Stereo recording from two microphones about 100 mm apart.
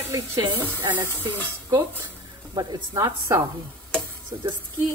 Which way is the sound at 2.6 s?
35° right (ahead or behind).